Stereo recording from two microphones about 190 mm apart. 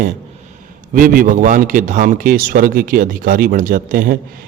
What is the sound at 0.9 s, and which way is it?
A man's voice, 45° right (ahead or behind).